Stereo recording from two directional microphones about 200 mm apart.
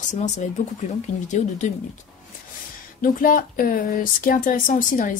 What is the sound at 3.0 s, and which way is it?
Speech, 45° left (ahead or behind).